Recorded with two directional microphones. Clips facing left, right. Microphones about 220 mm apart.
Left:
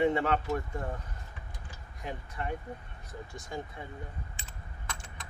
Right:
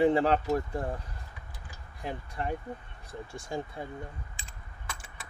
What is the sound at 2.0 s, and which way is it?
Speech, 35° right (ahead or behind).